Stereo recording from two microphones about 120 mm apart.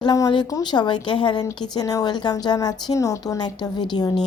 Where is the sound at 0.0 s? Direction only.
35° left (ahead or behind).